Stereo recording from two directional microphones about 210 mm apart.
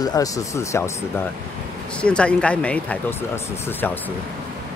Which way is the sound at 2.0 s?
5° left (ahead or behind).